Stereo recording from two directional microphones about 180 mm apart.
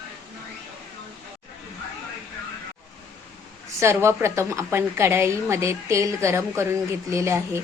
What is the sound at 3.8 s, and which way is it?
A woman's voice, 15° right (ahead or behind).